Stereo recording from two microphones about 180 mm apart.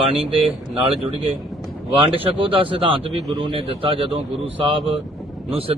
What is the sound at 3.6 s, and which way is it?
Speech, 30° right (ahead or behind).